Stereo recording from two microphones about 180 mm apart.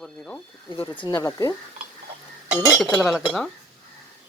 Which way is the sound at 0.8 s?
25° left (ahead or behind).